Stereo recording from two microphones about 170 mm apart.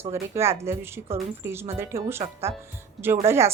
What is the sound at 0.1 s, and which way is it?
Speech, 15° right (ahead or behind).